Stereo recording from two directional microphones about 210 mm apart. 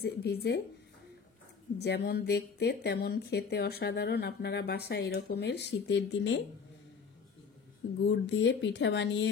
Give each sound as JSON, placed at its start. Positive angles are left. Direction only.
{"t": 0.0, "sound": "speech", "side_deg": 50}
{"t": 1.8, "sound": "speech", "side_deg": 50}
{"t": 8.0, "sound": "speech", "side_deg": 55}